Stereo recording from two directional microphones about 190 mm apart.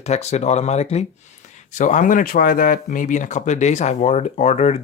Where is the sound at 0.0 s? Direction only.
35° left (ahead or behind).